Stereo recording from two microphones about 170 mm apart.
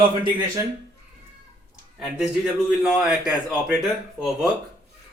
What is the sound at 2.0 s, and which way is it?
A man's voice, 5° right (ahead or behind).